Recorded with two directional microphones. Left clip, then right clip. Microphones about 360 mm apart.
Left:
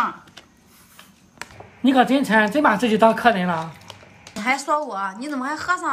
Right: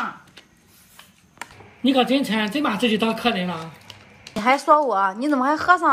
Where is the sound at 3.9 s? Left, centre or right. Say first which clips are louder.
Left 2 dB; centre.